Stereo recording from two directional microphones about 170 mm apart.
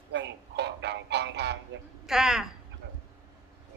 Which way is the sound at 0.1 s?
90° right.